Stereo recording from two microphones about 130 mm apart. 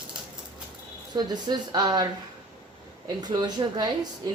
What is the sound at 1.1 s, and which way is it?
Speech, 35° right (ahead or behind).